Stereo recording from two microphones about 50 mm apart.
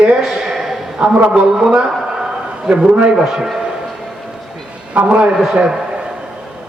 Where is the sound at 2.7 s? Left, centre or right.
Centre.